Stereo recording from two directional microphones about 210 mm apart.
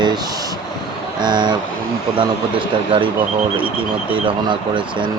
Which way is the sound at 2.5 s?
25° right (ahead or behind).